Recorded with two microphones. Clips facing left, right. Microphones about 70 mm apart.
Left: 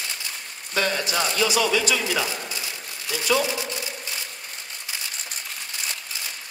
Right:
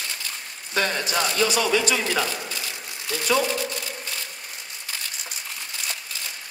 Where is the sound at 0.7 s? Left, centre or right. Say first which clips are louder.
Even; right.